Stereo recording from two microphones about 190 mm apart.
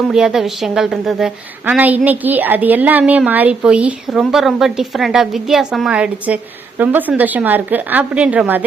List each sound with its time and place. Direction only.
0.1 s a woman's voice: 5° right (ahead or behind)